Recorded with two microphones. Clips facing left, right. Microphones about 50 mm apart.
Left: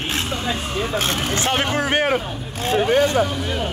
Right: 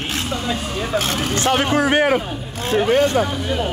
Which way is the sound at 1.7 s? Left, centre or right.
Right.